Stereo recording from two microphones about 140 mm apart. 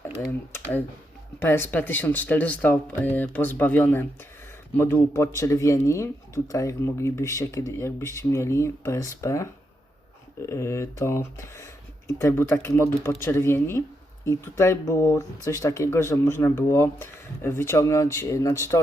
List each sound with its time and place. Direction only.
1.4 s speech: 15° left (ahead or behind)